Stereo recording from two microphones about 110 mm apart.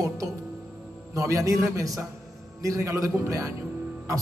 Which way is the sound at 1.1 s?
30° right (ahead or behind).